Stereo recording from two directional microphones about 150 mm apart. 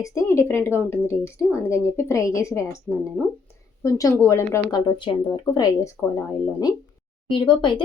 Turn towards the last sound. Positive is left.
turn(degrees=30)  # may be behind; listen again after turning